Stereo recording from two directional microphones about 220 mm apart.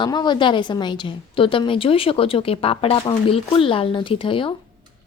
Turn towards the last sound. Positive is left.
turn(degrees=25)  # may be behind; listen again after turning